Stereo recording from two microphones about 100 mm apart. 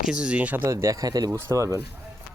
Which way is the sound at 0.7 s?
30° right (ahead or behind).